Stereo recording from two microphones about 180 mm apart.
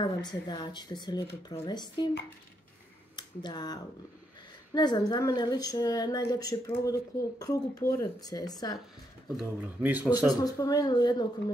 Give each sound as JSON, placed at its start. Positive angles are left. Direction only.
{"t": 0.0, "sound": "speech", "side_deg": 25}
{"t": 3.2, "sound": "speech", "side_deg": 25}
{"t": 9.4, "sound": "speech", "side_deg": -10}
{"t": 10.1, "sound": "speech", "side_deg": 20}